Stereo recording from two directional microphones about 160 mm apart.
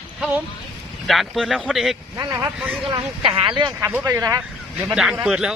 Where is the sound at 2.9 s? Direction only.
30° right (ahead or behind).